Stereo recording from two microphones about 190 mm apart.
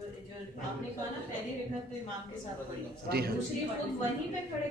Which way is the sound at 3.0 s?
55° right (ahead or behind).